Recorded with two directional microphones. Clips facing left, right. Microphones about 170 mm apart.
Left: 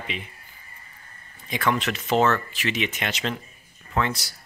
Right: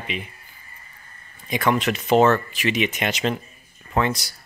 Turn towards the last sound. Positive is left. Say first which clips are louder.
# right 3 dB
turn(degrees=-15)  # may be behind; listen again after turning